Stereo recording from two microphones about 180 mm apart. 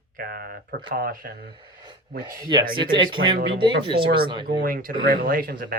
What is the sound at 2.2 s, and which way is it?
Speech, 25° right (ahead or behind).